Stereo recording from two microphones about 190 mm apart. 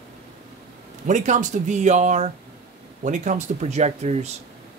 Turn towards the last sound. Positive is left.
turn(degrees=-35)  # may be behind; listen again after turning